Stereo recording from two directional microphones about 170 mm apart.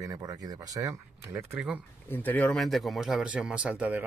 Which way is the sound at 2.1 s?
10° left (ahead or behind).